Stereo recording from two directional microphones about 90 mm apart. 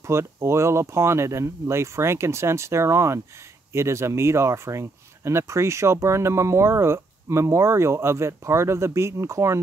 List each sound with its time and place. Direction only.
0.0 s speech: 30° right (ahead or behind)